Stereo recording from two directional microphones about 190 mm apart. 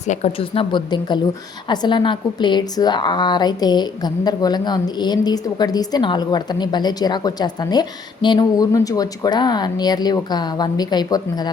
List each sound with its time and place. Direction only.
0.1 s speech: 35° left (ahead or behind)